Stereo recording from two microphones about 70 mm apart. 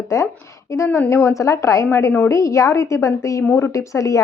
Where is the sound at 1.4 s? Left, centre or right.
Left.